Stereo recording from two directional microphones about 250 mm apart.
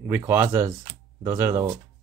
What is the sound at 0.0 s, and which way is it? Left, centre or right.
Speech, centre.